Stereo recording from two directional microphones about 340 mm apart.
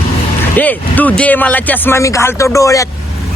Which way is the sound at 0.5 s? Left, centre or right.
Centre.